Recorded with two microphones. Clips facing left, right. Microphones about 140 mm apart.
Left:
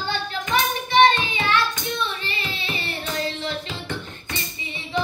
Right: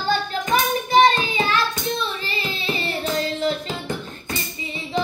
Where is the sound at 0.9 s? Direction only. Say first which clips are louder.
Right 1 dB; 35° right (ahead or behind).